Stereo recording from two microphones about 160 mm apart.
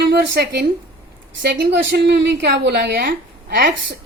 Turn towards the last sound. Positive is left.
turn(degrees=-70)  # may be behind; listen again after turning